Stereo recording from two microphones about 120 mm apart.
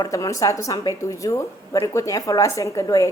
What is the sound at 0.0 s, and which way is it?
A woman's voice, 25° left (ahead or behind).